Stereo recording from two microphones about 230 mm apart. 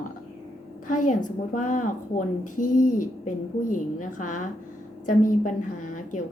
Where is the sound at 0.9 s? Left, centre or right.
Left.